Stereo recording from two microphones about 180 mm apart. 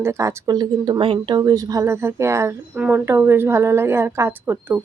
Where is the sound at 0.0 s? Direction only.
15° right (ahead or behind).